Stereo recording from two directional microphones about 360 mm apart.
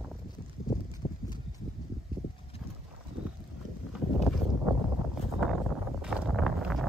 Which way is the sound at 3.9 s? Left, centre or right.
Centre.